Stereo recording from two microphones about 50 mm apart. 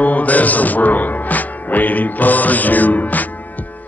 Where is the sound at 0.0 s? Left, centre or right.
Left.